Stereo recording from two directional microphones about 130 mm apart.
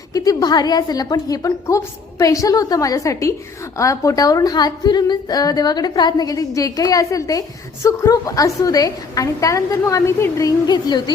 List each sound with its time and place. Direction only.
0.1 s a woman's voice: 30° left (ahead or behind)